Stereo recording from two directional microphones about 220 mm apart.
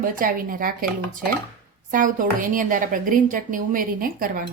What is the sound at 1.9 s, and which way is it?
A woman's voice, 35° right (ahead or behind).